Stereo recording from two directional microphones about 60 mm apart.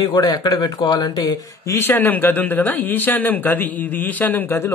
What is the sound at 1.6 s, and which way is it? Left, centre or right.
Speech, left.